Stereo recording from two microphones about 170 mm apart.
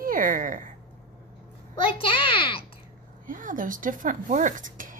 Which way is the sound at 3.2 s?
50° right (ahead or behind).